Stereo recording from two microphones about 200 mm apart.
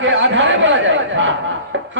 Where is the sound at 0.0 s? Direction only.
65° right (ahead or behind).